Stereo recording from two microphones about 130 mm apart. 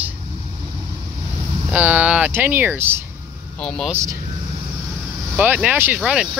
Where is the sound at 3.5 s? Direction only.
5° left (ahead or behind).